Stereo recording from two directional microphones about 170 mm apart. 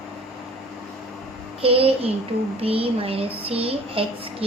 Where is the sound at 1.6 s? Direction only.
35° right (ahead or behind).